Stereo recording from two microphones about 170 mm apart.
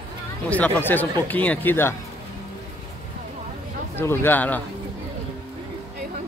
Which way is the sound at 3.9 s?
15° left (ahead or behind).